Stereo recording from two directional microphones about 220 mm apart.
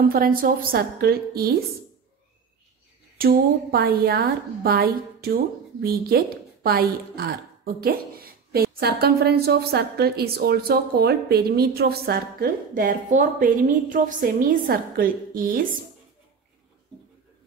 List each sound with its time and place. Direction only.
0.1 s a woman's voice: 40° right (ahead or behind)
3.2 s a woman's voice: 45° right (ahead or behind)